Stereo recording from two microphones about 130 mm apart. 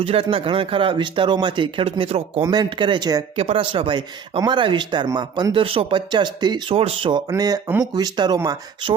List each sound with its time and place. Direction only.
0.0 s speech: 45° right (ahead or behind)
2.5 s speech: 35° right (ahead or behind)
3.3 s speech: 50° right (ahead or behind)
6.7 s speech: 50° right (ahead or behind)
7.1 s speech: 30° right (ahead or behind)